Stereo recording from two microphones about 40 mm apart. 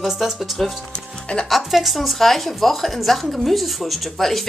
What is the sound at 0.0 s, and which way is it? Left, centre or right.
Speech, centre.